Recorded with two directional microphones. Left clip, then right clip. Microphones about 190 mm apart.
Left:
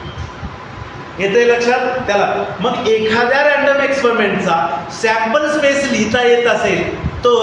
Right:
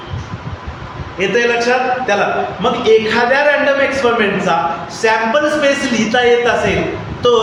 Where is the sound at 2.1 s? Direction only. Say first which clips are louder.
Even; 15° right (ahead or behind).